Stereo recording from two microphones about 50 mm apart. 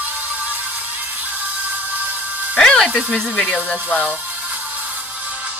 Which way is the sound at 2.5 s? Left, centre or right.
Centre.